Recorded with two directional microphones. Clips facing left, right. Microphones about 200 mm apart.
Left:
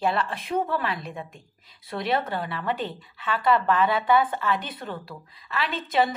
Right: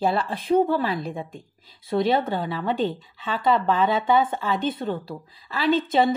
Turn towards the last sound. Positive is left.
turn(degrees=-30)  # may be behind; listen again after turning